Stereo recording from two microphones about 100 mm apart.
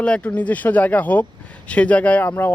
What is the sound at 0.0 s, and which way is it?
Speech, 10° left (ahead or behind).